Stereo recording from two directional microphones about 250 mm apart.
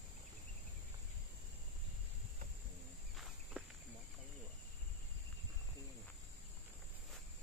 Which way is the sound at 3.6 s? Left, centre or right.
Centre.